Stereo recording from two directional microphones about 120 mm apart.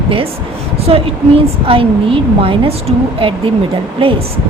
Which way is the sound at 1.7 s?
45° right (ahead or behind).